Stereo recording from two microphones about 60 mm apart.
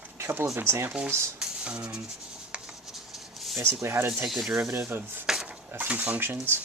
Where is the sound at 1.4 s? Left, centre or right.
Centre.